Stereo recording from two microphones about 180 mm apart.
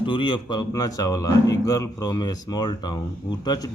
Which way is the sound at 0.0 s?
25° left (ahead or behind).